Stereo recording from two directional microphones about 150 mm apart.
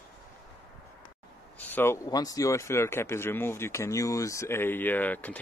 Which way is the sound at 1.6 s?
15° left (ahead or behind).